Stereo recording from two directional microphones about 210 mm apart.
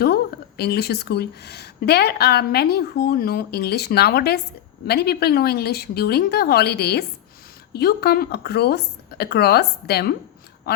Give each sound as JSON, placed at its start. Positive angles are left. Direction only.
{"t": 0.0, "sound": "a woman's voice", "side_deg": 50}